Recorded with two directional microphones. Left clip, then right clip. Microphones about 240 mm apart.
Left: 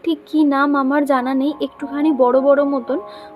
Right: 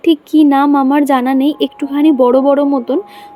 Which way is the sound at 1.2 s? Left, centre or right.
Right.